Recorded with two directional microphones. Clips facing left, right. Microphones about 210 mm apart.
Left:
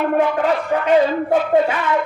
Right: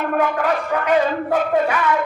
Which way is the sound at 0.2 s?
25° left (ahead or behind).